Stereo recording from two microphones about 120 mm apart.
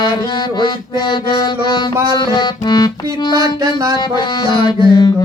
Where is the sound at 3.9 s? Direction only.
40° left (ahead or behind).